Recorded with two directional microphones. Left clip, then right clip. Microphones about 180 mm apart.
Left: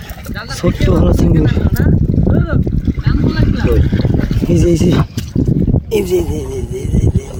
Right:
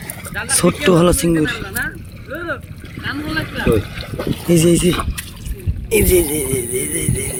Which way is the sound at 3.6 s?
25° left (ahead or behind).